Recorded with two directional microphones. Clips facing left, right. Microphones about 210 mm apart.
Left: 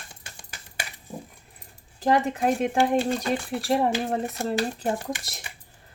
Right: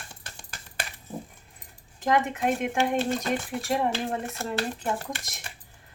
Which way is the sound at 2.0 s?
35° left (ahead or behind).